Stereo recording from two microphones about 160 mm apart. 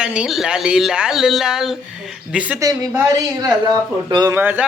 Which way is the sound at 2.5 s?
20° right (ahead or behind).